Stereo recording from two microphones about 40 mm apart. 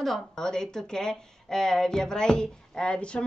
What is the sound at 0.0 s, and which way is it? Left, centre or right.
A woman's voice, centre.